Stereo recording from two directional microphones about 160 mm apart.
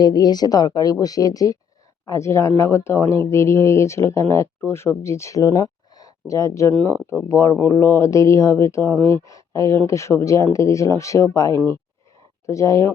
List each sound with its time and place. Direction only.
0.0 s speech: 25° left (ahead or behind)